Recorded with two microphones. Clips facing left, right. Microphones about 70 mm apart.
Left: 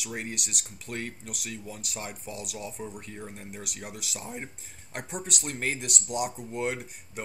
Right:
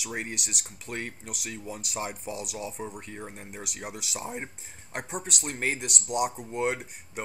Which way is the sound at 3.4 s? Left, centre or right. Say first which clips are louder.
Right 2 dB; centre.